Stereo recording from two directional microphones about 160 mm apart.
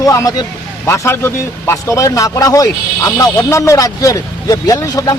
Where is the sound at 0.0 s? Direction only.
20° left (ahead or behind).